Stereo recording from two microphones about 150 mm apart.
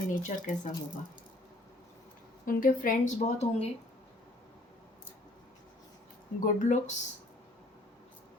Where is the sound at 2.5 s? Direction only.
65° left (ahead or behind).